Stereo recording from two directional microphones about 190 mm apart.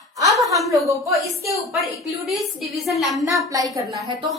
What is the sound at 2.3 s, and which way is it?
A woman's voice, centre (ahead or behind).